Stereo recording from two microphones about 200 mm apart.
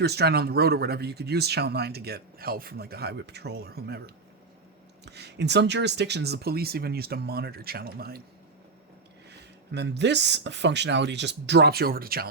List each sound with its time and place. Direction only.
0.0 s speech: 55° right (ahead or behind)
9.7 s speech: 55° right (ahead or behind)